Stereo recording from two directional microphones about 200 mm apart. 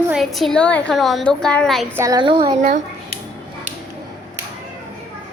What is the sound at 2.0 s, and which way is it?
Speech, 20° right (ahead or behind).